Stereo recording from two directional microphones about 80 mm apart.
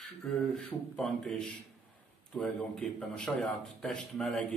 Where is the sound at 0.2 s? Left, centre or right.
Centre.